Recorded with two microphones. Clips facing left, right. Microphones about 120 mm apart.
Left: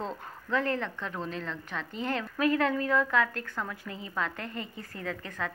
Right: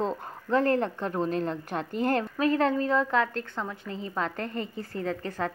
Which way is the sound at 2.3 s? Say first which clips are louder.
Left 1 dB; 30° right (ahead or behind).